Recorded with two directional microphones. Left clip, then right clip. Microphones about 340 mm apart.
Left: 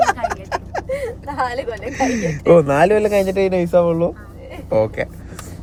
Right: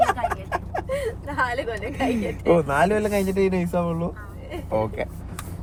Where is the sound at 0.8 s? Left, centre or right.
Centre.